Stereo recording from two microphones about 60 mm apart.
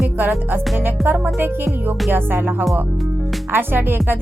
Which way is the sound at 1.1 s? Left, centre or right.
Right.